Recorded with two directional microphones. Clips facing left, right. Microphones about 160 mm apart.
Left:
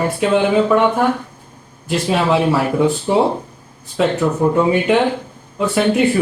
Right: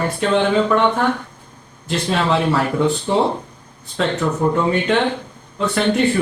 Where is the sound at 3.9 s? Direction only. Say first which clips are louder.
Left 3 dB; 5° left (ahead or behind).